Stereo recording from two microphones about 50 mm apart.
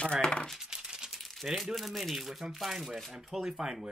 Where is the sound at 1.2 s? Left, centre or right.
Centre.